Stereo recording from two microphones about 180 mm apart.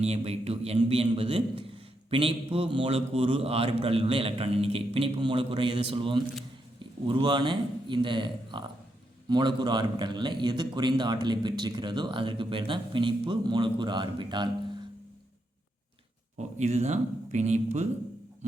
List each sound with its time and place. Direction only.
0.0 s a man's voice: 35° right (ahead or behind)
16.6 s a man's voice: 40° right (ahead or behind)